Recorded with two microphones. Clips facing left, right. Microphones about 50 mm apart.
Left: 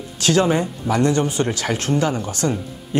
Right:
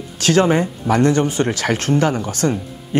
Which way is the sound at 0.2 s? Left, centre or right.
Right.